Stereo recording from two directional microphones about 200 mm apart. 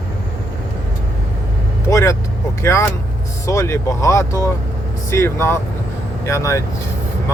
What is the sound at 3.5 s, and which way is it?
Speech, 15° left (ahead or behind).